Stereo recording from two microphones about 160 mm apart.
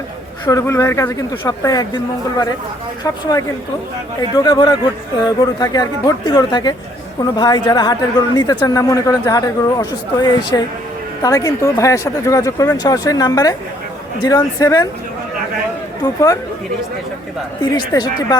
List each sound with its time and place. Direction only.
0.4 s speech: 20° left (ahead or behind)
3.0 s speech: 25° left (ahead or behind)
16.0 s speech: 25° left (ahead or behind)
17.6 s speech: 25° left (ahead or behind)